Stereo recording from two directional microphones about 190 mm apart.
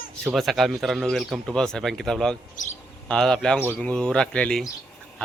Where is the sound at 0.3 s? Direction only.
Centre (ahead or behind).